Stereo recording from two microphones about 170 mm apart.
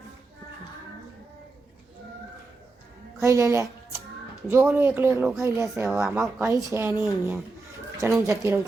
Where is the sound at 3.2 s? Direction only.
15° right (ahead or behind).